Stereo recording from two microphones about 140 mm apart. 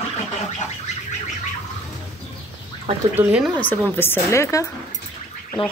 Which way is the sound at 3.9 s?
20° left (ahead or behind).